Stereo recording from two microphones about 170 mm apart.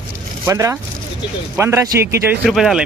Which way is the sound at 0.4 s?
15° right (ahead or behind).